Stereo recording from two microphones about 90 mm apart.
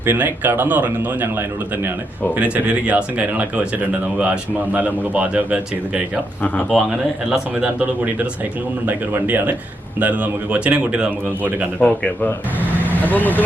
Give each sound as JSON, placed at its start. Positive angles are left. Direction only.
{"t": 0.0, "sound": "a man's voice", "side_deg": -20}
{"t": 7.3, "sound": "a man's voice", "side_deg": -10}
{"t": 11.8, "sound": "speech", "side_deg": 10}
{"t": 12.8, "sound": "vehicle", "side_deg": 20}